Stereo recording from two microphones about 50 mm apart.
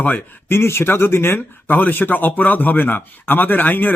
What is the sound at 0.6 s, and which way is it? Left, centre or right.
Speech, left.